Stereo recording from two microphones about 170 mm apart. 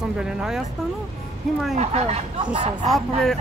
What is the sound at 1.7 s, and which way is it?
Speech, 40° right (ahead or behind).